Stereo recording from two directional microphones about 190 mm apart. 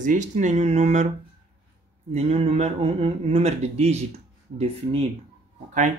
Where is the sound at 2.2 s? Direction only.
30° right (ahead or behind).